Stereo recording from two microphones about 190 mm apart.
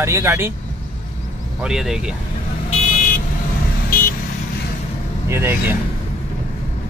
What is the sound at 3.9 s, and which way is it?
Vehicle, 45° left (ahead or behind).